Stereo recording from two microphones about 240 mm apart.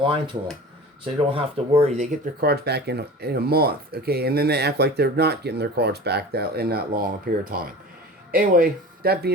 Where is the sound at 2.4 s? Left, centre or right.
Right.